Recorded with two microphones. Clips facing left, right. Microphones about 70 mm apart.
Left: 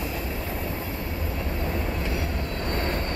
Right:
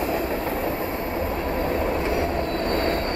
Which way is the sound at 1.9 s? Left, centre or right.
Right.